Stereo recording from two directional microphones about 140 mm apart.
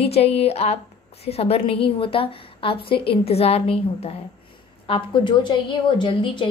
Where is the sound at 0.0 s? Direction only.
45° left (ahead or behind).